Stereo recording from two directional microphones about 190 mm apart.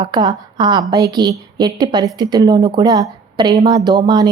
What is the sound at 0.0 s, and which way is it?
Speech, 25° right (ahead or behind).